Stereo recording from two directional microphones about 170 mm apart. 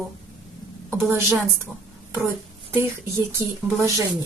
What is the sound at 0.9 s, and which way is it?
Speech, 15° right (ahead or behind).